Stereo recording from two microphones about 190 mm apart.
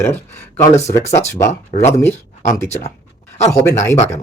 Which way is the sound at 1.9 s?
10° left (ahead or behind).